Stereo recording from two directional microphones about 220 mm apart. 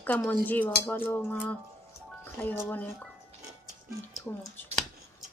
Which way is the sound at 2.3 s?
10° left (ahead or behind).